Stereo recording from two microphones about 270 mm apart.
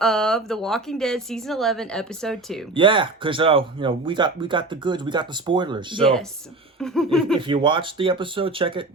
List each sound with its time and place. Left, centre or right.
0.0 s a woman's voice: centre
2.7 s speech: centre
6.7 s a woman's voice: centre
7.3 s speech: centre